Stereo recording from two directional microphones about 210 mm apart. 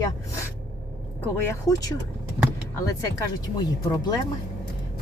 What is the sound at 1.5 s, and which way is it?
Speech, 15° left (ahead or behind).